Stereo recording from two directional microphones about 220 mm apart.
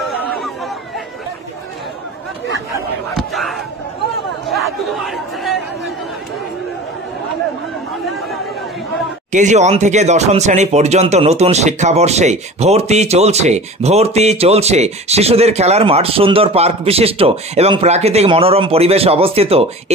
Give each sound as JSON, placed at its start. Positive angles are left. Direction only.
{"t": 3.2, "sound": "a sound", "side_deg": 0}
{"t": 4.5, "sound": "chatter", "side_deg": 0}
{"t": 9.3, "sound": "speech", "side_deg": -35}